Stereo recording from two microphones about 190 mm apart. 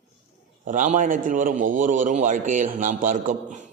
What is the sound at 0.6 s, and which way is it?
A man's voice, 40° right (ahead or behind).